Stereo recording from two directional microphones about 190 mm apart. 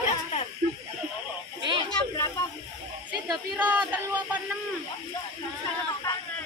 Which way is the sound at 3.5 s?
10° right (ahead or behind).